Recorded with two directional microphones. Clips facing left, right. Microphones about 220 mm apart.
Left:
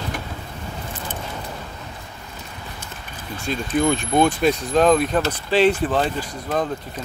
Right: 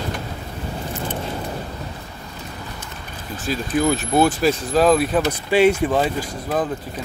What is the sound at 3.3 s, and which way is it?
Speech, 5° right (ahead or behind).